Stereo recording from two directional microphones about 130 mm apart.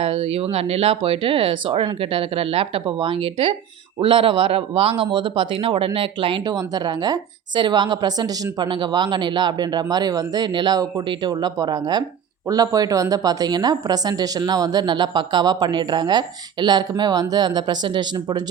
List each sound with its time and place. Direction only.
0.0 s a man's voice: 50° right (ahead or behind); by 18.4 s 35° right (ahead or behind)